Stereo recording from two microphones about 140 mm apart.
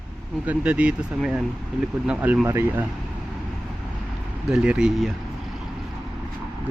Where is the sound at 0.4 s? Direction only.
10° right (ahead or behind).